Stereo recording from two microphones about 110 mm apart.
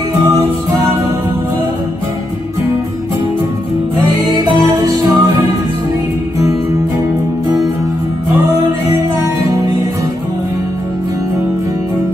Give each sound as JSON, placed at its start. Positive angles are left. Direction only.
{"t": 4.5, "sound": "music", "side_deg": -35}